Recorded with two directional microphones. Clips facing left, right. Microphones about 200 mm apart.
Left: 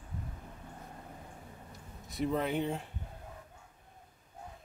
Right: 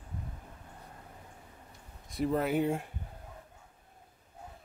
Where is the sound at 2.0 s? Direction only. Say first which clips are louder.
Right 2 dB; centre (ahead or behind).